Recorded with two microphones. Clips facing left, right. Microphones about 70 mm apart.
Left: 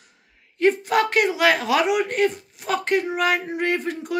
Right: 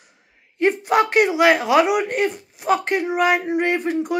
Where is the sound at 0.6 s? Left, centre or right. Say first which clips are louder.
Right 1 dB; centre.